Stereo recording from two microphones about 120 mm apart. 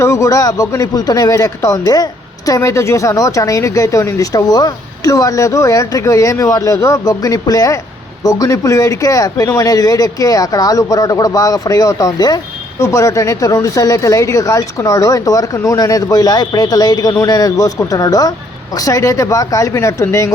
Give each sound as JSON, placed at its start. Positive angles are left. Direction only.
{"t": 0.0, "sound": "speech", "side_deg": 25}